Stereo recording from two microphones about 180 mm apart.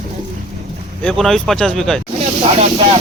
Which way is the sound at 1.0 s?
Centre (ahead or behind).